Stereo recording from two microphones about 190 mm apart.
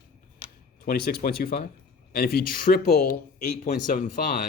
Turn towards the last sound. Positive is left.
turn(degrees=45)  # may be behind; listen again after turning